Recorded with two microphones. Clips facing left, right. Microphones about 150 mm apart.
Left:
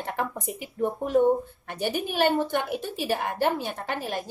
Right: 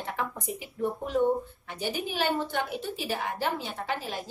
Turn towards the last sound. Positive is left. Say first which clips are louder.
# left 2 dB
turn(degrees=55)  # may be behind; listen again after turning